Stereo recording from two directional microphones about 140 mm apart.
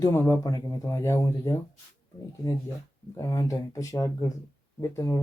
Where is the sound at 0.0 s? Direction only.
15° left (ahead or behind).